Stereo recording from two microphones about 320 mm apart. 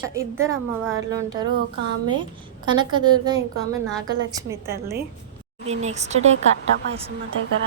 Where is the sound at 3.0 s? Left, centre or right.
Centre.